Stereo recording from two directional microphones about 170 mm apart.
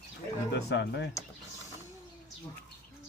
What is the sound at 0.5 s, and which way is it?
Speech, 85° left.